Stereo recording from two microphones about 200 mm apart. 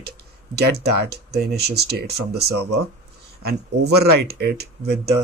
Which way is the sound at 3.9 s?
55° right (ahead or behind).